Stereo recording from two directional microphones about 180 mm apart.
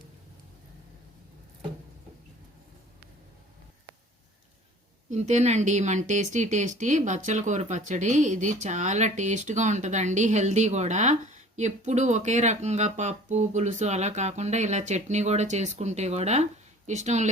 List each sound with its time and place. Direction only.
5.1 s speech: 40° right (ahead or behind)